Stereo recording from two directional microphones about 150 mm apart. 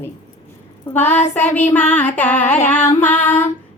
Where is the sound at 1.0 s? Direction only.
50° left (ahead or behind).